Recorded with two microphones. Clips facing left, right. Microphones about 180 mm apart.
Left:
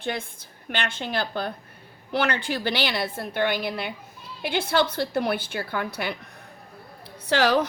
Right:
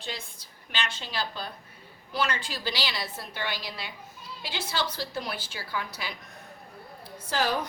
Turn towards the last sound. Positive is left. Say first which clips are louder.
# left 7 dB
turn(degrees=85)